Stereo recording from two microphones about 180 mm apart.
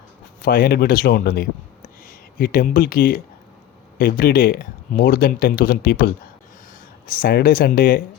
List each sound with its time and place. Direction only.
0.4 s speech: 55° left (ahead or behind)
7.1 s speech: 55° left (ahead or behind)